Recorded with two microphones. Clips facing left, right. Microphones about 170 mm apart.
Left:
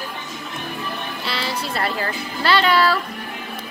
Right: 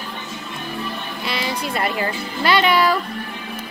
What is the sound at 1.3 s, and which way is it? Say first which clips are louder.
Speech: right 2 dB; 15° right (ahead or behind).